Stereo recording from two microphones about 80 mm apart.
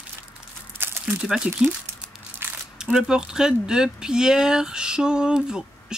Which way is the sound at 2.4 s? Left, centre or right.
Right.